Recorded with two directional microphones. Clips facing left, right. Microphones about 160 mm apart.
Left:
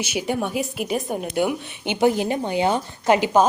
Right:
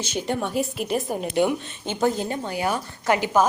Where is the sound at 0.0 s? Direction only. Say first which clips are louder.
Left 2 dB; 10° left (ahead or behind).